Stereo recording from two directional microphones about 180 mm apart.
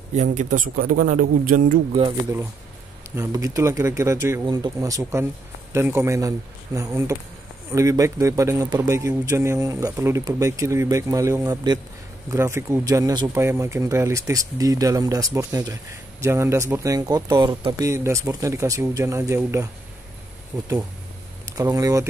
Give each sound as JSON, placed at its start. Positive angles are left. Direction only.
{"t": 0.1, "sound": "a man's voice", "side_deg": -40}
{"t": 3.2, "sound": "speech", "side_deg": -20}